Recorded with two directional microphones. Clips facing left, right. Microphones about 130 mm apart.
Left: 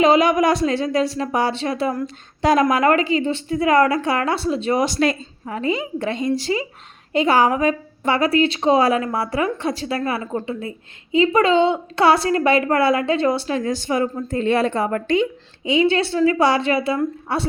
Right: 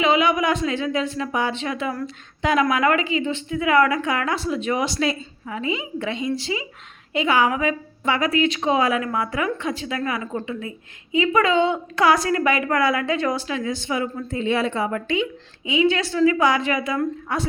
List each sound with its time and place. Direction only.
0.0 s a woman's voice: 40° left (ahead or behind)
4.9 s a woman's voice: 50° left (ahead or behind); by 13.6 s 30° left (ahead or behind)
13.6 s a woman's voice: 40° left (ahead or behind)